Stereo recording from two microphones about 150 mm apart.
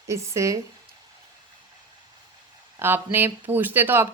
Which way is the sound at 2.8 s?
15° right (ahead or behind).